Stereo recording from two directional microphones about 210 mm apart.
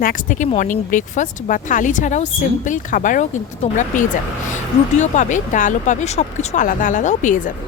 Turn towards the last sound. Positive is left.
turn(degrees=40)  # may be behind; listen again after turning